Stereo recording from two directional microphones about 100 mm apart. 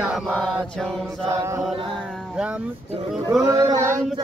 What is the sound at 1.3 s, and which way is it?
Chant, 30° right (ahead or behind).